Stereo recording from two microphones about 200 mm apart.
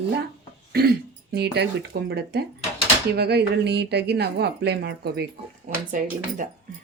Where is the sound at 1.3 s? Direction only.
55° right (ahead or behind).